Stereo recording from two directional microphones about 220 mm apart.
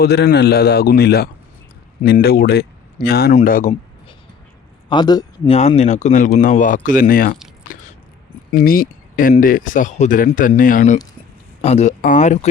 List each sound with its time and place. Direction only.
0.0 s speech: 45° left (ahead or behind)
4.9 s speech: 20° left (ahead or behind)
5.5 s speech: 30° left (ahead or behind)
8.5 s speech: 40° left (ahead or behind)